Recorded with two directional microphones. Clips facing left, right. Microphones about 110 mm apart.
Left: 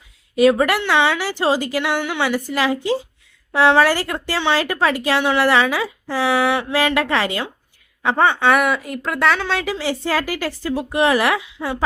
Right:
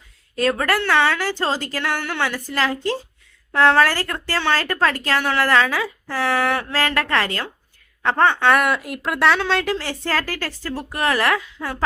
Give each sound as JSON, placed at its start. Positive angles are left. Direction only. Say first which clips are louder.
{"t": 0.3, "sound": "speech", "louder": "left 5 dB", "side_deg": 15}